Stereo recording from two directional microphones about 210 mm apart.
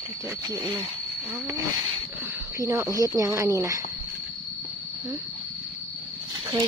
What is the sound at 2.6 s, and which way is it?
Speech, 15° right (ahead or behind).